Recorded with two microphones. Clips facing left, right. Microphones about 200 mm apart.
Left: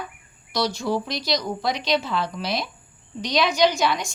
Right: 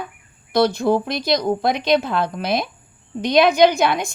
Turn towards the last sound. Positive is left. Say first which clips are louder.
# right 5 dB
turn(degrees=-55)  # may be behind; listen again after turning